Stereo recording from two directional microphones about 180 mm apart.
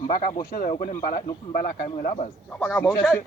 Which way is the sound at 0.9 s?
50° left (ahead or behind).